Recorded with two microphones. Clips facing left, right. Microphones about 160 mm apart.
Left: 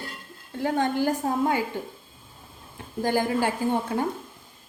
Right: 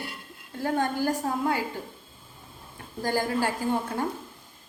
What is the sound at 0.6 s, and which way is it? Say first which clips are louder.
A woman's voice: left 2 dB; 20° left (ahead or behind).